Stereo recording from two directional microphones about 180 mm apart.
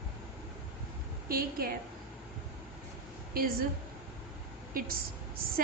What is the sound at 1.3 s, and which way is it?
Speech, 55° right (ahead or behind).